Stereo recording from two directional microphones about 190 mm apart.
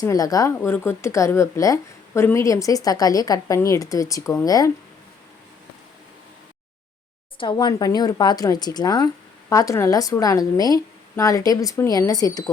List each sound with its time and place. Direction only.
0.0 s a woman's voice: 20° left (ahead or behind)
7.3 s a woman's voice: 25° left (ahead or behind)